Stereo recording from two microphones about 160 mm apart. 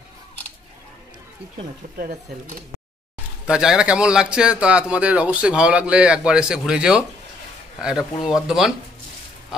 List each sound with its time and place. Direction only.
2.0 s speech: 55° right (ahead or behind)
3.4 s a man's voice: 5° right (ahead or behind)